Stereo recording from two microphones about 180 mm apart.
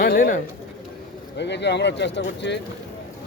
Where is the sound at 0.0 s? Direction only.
55° left (ahead or behind).